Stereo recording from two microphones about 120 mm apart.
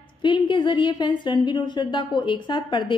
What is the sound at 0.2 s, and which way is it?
A woman's voice, 40° left (ahead or behind).